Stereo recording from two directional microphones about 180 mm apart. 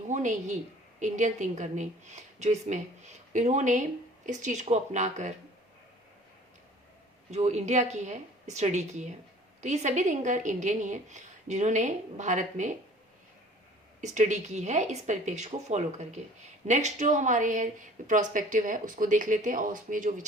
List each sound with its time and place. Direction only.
0.1 s a woman's voice: 45° right (ahead or behind)
7.3 s a woman's voice: 40° right (ahead or behind)
14.0 s a woman's voice: 40° right (ahead or behind)